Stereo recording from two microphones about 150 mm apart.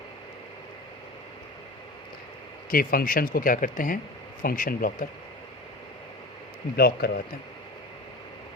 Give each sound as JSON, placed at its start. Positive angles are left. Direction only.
{"t": 2.6, "sound": "speech", "side_deg": 70}
{"t": 6.7, "sound": "speech", "side_deg": 90}